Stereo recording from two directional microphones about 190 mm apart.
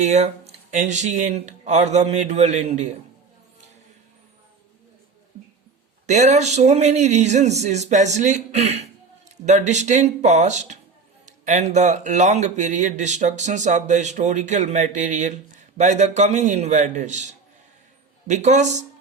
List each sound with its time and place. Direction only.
0.0 s speech: 35° right (ahead or behind)
6.1 s speech: 35° right (ahead or behind)